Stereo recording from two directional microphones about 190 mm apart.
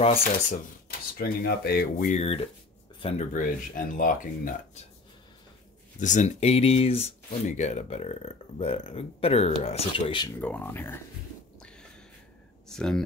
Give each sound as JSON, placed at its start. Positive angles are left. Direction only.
{"t": 0.2, "sound": "speech", "side_deg": 50}
{"t": 3.3, "sound": "speech", "side_deg": 45}
{"t": 5.9, "sound": "speech", "side_deg": 40}
{"t": 10.4, "sound": "speech", "side_deg": 10}
{"t": 12.6, "sound": "speech", "side_deg": 5}